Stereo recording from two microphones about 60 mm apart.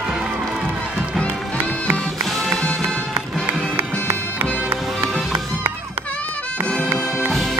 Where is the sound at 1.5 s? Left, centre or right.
Centre.